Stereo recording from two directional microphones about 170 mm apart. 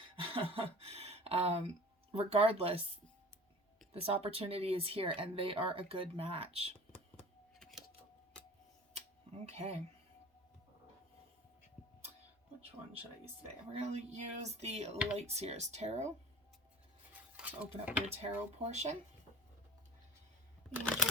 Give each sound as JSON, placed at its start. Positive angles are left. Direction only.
{"t": 0.0, "sound": "a sound", "side_deg": -35}
{"t": 2.1, "sound": "speech", "side_deg": -35}
{"t": 3.9, "sound": "speech", "side_deg": -35}
{"t": 7.6, "sound": "a sound", "side_deg": 0}
{"t": 9.0, "sound": "tick-tock", "side_deg": -40}
{"t": 13.7, "sound": "speech", "side_deg": -40}
{"t": 17.1, "sound": "dishes", "side_deg": -10}
{"t": 18.1, "sound": "speech", "side_deg": -40}
{"t": 20.8, "sound": "a sound", "side_deg": 5}